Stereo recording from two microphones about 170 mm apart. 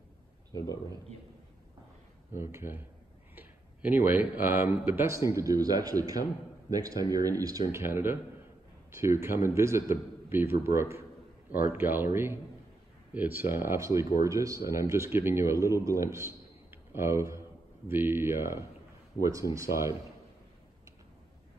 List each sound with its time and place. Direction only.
2.3 s speech: 15° right (ahead or behind)